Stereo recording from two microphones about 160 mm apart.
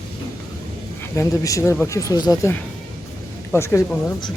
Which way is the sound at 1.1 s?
20° left (ahead or behind).